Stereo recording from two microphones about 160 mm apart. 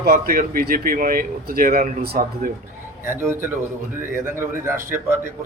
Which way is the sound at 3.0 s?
15° right (ahead or behind).